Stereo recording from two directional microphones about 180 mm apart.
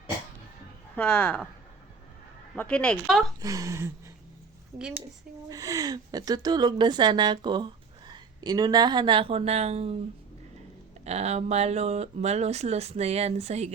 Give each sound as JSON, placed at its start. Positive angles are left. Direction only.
{"t": 0.9, "sound": "speech", "side_deg": 10}
{"t": 2.6, "sound": "speech", "side_deg": 5}
{"t": 3.4, "sound": "speech", "side_deg": -20}
{"t": 5.5, "sound": "a woman's voice", "side_deg": -20}
{"t": 11.0, "sound": "speech", "side_deg": -35}